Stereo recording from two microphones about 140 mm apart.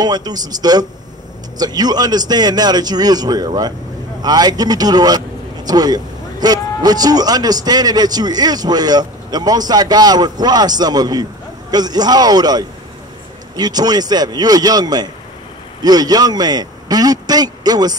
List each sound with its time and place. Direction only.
0.0 s speech: 30° right (ahead or behind)